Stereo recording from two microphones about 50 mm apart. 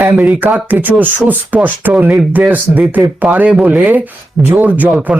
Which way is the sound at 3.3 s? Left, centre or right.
Right.